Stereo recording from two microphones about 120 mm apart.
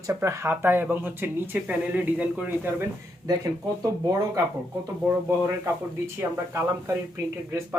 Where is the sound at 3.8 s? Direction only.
30° right (ahead or behind).